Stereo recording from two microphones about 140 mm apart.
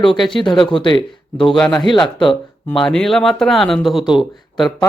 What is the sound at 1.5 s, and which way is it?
Speech, 5° left (ahead or behind).